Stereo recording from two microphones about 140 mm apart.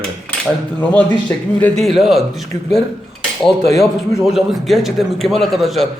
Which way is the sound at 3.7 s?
20° left (ahead or behind).